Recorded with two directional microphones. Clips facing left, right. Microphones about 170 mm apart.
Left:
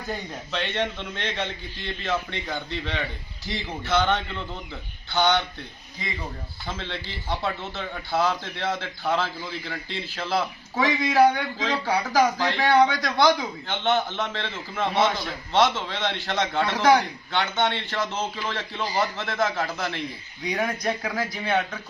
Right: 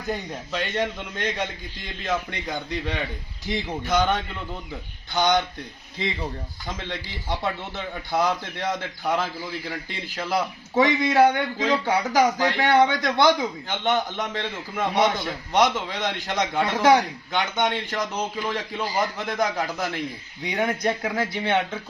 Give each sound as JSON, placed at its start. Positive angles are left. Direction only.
{"t": 0.5, "sound": "speech", "side_deg": -10}
{"t": 6.7, "sound": "speech", "side_deg": -10}
{"t": 10.8, "sound": "speech", "side_deg": -25}